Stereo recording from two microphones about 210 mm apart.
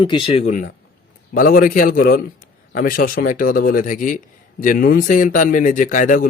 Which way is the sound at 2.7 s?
40° left (ahead or behind).